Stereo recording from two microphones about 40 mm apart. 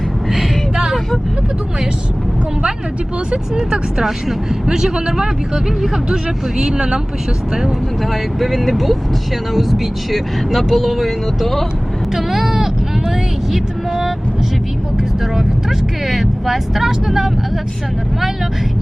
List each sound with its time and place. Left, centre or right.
3.5 s speech: right
4.0 s speech: centre
6.6 s speech: right
8.1 s speech: centre
12.1 s speech: centre
16.5 s speech: centre